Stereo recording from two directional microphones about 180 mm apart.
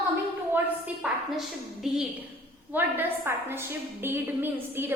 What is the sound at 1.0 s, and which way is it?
A woman's voice, 5° right (ahead or behind).